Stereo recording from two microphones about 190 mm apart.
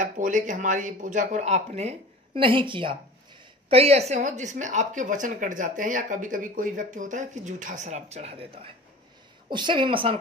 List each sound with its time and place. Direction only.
0.0 s a woman's voice: 45° right (ahead or behind); by 10.1 s 25° right (ahead or behind)